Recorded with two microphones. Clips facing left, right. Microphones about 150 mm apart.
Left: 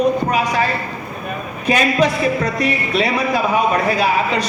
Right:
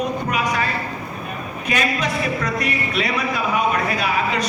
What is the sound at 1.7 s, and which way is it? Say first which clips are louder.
A man's voice: left 7 dB; 30° left (ahead or behind).